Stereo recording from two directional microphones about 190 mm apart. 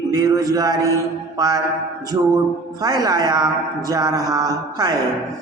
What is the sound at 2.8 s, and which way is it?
Music, 20° right (ahead or behind).